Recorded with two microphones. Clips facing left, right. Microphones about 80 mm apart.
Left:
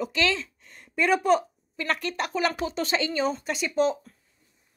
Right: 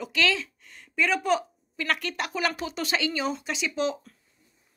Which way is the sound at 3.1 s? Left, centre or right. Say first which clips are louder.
Left 3 dB; centre.